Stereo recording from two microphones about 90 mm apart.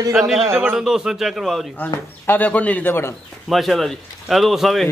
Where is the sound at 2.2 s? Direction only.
15° left (ahead or behind).